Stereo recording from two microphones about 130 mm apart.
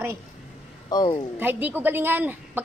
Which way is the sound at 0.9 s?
35° left (ahead or behind).